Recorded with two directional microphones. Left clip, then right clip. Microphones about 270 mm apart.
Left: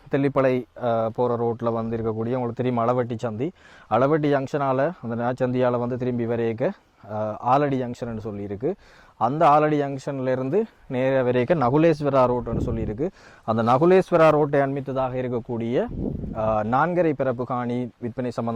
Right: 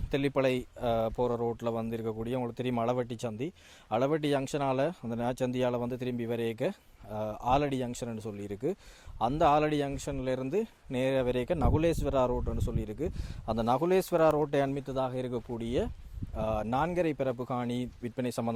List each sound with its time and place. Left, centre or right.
0.1 s speech: centre